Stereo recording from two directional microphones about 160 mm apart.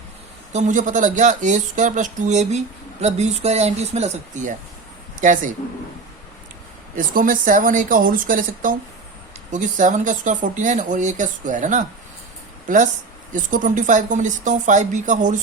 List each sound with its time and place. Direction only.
0.5 s a woman's voice: 50° right (ahead or behind)
6.9 s a woman's voice: 60° right (ahead or behind)